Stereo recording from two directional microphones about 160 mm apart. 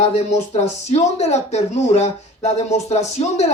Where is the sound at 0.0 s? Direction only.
40° left (ahead or behind).